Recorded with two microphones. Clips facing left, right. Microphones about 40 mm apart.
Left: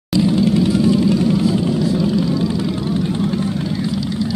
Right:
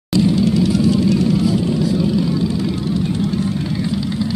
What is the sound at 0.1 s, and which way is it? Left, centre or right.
Vehicle, centre.